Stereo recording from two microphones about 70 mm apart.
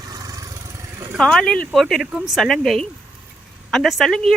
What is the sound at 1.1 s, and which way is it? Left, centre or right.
Speech, centre.